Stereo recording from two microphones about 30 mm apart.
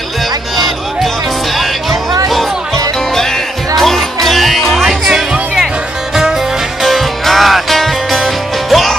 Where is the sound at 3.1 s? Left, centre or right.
Centre.